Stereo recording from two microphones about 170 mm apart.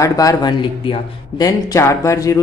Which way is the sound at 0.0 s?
20° left (ahead or behind).